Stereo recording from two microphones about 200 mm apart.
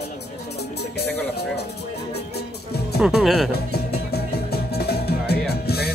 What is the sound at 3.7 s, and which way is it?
Music, 50° left (ahead or behind).